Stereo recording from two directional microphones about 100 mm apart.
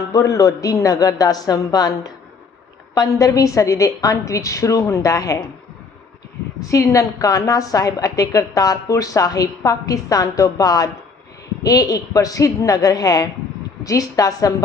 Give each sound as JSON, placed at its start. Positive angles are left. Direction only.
{"t": 0.1, "sound": "a woman's voice", "side_deg": 35}
{"t": 6.6, "sound": "a woman's voice", "side_deg": 30}